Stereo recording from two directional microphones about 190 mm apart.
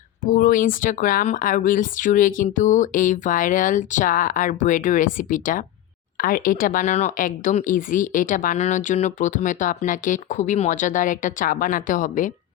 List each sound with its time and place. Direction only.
0.3 s speech: 45° left (ahead or behind)